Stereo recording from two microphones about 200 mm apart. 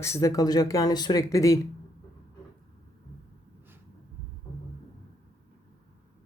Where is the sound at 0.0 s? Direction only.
15° left (ahead or behind).